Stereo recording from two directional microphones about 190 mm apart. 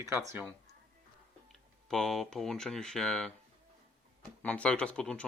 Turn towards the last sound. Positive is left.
turn(degrees=5)  # may be behind; listen again after turning